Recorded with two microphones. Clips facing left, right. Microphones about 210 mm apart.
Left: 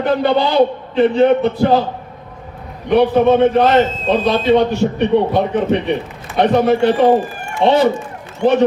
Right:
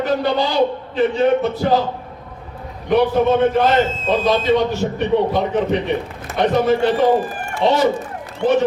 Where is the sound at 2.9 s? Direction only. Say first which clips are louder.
Left 3 dB; 60° left (ahead or behind).